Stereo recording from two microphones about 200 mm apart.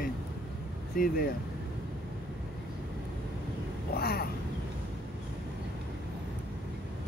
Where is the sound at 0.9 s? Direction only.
45° left (ahead or behind).